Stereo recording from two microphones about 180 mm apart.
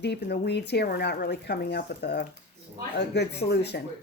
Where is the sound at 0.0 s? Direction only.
70° left (ahead or behind).